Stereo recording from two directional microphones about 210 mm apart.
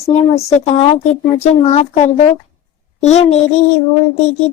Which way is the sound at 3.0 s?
30° left (ahead or behind).